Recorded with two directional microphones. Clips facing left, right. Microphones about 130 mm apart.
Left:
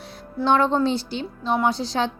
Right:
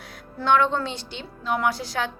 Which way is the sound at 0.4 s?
35° left (ahead or behind).